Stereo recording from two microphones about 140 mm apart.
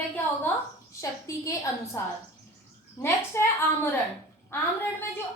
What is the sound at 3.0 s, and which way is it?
Speech, 15° left (ahead or behind).